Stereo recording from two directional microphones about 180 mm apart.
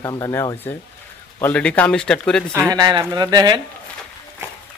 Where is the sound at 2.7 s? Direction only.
25° right (ahead or behind).